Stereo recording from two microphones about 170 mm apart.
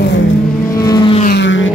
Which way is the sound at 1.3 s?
90° left.